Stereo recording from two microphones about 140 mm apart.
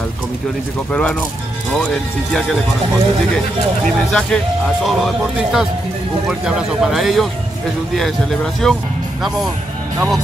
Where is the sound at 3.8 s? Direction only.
5° left (ahead or behind).